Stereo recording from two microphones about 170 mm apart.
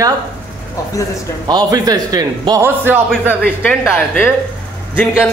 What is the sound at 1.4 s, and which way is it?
Speech, 25° right (ahead or behind).